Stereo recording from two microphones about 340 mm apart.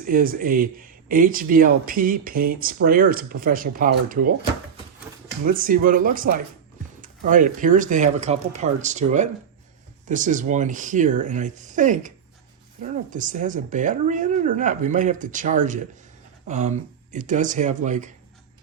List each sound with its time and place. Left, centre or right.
0.0 s speech: right
5.5 s speech: right